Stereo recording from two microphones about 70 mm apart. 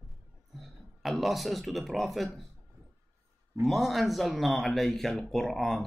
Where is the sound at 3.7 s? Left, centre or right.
Centre.